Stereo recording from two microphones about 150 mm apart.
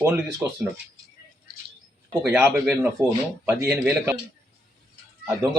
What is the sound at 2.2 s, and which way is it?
Speech, 15° right (ahead or behind).